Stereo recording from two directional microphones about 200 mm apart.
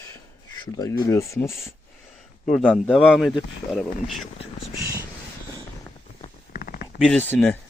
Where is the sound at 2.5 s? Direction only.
5° left (ahead or behind).